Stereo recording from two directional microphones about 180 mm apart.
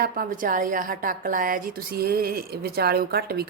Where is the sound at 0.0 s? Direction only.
55° right (ahead or behind).